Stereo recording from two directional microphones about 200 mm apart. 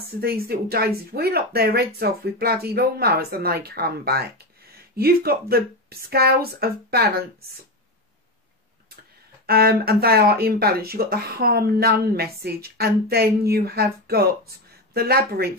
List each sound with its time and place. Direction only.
0.2 s speech: 50° right (ahead or behind)
9.5 s speech: 50° right (ahead or behind)